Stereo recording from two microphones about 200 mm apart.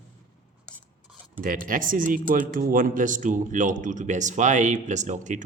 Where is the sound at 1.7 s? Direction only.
45° right (ahead or behind).